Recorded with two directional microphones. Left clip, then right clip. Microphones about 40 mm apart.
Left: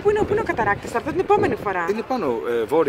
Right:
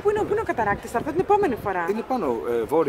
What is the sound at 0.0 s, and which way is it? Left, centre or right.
Speech, right.